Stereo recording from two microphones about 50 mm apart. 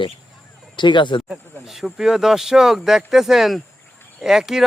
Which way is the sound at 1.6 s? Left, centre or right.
Centre.